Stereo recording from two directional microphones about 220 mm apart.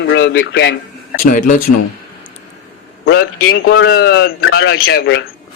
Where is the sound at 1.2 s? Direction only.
40° left (ahead or behind).